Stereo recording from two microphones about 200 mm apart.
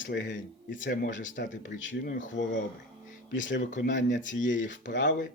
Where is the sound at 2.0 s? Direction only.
40° left (ahead or behind).